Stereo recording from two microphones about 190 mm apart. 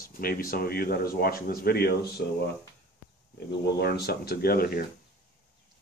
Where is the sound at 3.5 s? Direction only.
55° left (ahead or behind).